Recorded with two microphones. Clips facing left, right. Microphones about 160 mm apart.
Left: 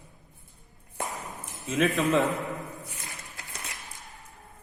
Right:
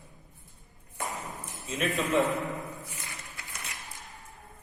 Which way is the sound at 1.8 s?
90° left.